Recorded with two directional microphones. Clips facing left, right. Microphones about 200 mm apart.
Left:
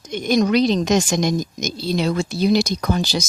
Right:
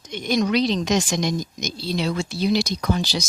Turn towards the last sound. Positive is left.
turn(degrees=45)  # may be behind; listen again after turning